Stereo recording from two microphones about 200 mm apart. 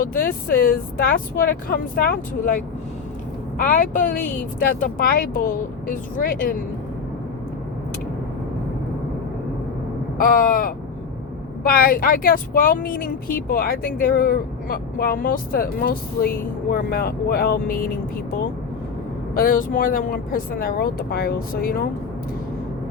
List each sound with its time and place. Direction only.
0.0 s speech: 45° left (ahead or behind)
3.6 s speech: 40° left (ahead or behind)
10.2 s speech: 45° left (ahead or behind)
19.4 s speech: 45° left (ahead or behind)